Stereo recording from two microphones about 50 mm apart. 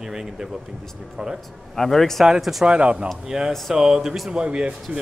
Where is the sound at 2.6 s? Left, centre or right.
Right; by 4.3 s centre.